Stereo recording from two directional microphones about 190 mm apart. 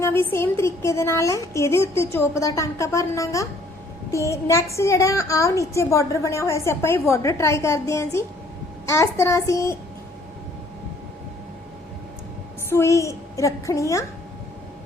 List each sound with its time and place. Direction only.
0.0 s a woman's voice: 10° left (ahead or behind)
12.7 s a woman's voice: 15° left (ahead or behind)